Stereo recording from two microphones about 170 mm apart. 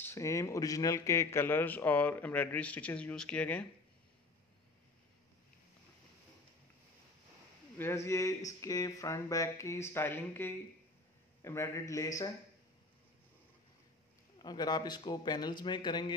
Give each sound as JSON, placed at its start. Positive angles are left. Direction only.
{"t": 0.0, "sound": "a man's voice", "side_deg": 15}
{"t": 7.7, "sound": "a man's voice", "side_deg": 15}
{"t": 14.4, "sound": "a man's voice", "side_deg": 25}